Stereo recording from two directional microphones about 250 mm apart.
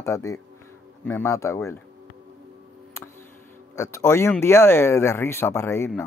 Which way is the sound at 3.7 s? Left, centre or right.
Centre.